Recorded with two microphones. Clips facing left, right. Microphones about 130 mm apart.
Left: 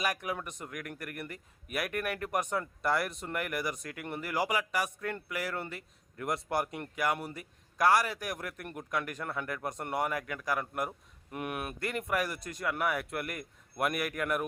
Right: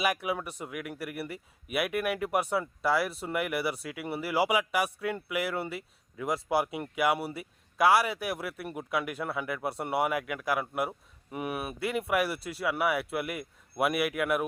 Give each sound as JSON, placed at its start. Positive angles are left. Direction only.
{"t": 0.0, "sound": "speech", "side_deg": -10}